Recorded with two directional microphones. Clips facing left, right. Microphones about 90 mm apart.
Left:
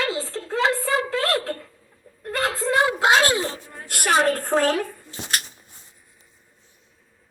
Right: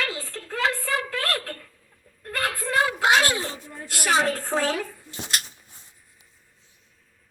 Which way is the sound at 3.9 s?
50° left (ahead or behind).